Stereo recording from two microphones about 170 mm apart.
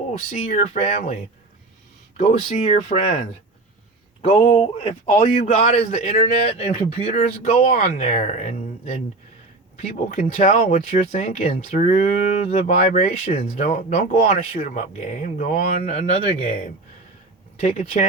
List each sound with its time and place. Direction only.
0.1 s a man's voice: 40° left (ahead or behind)
4.2 s a man's voice: 35° left (ahead or behind)
11.2 s a man's voice: 40° left (ahead or behind)
15.8 s a man's voice: 35° left (ahead or behind)